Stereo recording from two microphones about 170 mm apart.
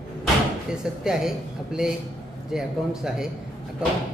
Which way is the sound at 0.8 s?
5° right (ahead or behind).